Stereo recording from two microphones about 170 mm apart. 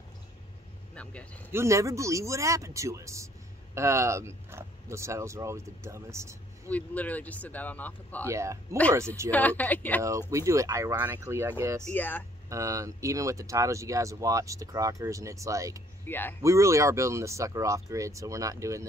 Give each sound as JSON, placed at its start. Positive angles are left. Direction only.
{"t": 0.9, "sound": "speech", "side_deg": 5}
{"t": 1.5, "sound": "speech", "side_deg": -15}
{"t": 6.7, "sound": "speech", "side_deg": 10}
{"t": 8.3, "sound": "speech", "side_deg": -15}
{"t": 9.3, "sound": "speech", "side_deg": 10}
{"t": 10.0, "sound": "speech", "side_deg": -20}
{"t": 11.9, "sound": "speech", "side_deg": 10}
{"t": 12.4, "sound": "speech", "side_deg": -20}
{"t": 16.1, "sound": "speech", "side_deg": 10}
{"t": 16.4, "sound": "speech", "side_deg": -15}